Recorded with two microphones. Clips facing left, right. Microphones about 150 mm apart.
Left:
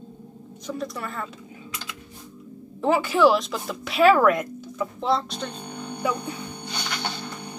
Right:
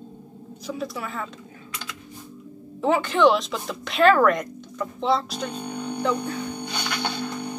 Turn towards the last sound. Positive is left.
turn(degrees=-10)  # may be behind; listen again after turning